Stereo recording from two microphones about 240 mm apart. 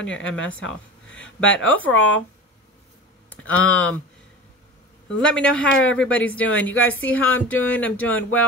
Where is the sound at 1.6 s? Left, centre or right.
Left.